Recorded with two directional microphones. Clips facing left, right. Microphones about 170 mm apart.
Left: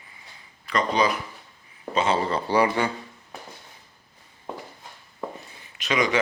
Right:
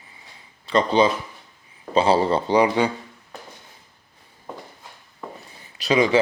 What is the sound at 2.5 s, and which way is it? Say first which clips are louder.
Speech: right 2 dB; 15° right (ahead or behind).